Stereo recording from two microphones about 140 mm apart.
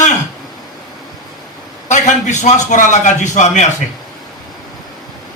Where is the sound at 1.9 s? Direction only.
60° left (ahead or behind).